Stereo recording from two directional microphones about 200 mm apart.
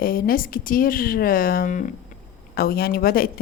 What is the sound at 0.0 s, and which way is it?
A woman's voice, 45° left (ahead or behind).